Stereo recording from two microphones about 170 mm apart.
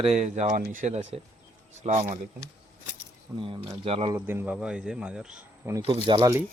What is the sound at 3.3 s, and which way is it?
Speech, 30° right (ahead or behind).